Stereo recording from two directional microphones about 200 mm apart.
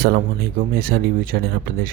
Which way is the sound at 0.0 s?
50° right (ahead or behind).